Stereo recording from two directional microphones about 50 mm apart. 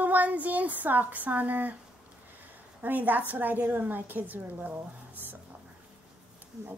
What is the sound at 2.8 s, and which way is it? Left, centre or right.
Speech, right.